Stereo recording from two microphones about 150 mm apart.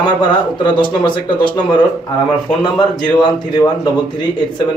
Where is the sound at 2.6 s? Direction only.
30° left (ahead or behind).